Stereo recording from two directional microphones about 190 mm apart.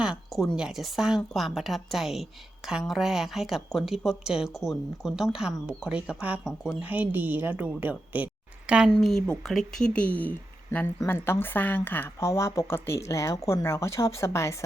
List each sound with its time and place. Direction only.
0.0 s speech: centre (ahead or behind); by 14.5 s 15° left (ahead or behind)